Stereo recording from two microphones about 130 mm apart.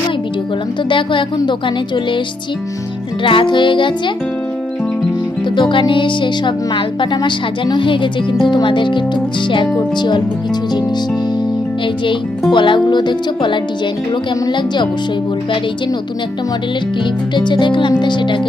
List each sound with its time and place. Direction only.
0.9 s speech: 40° left (ahead or behind)
3.2 s speech: 40° left (ahead or behind)
5.5 s speech: 40° left (ahead or behind)
12.5 s speech: 40° left (ahead or behind)
17.3 s speech: 35° left (ahead or behind)